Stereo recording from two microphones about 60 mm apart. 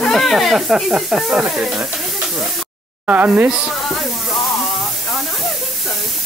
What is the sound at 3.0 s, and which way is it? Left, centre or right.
Speech, right.